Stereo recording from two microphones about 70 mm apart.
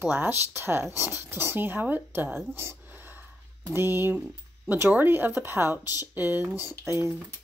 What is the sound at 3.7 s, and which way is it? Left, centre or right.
Speech, right.